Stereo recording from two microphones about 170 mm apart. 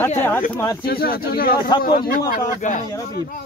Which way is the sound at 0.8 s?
60° left (ahead or behind).